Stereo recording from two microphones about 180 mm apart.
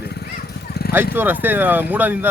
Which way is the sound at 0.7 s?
60° left (ahead or behind).